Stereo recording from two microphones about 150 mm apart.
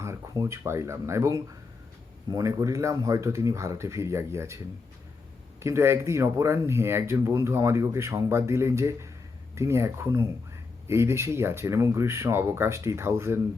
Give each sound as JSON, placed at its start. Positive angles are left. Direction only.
{"t": 0.0, "sound": "speech", "side_deg": -20}